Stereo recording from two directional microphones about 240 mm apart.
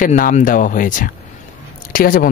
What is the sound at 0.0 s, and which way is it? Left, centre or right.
Speech, left.